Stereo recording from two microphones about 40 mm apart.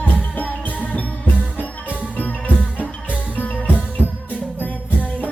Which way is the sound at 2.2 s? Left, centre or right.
Left.